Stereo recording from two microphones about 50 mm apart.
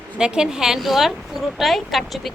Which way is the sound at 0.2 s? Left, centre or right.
Centre.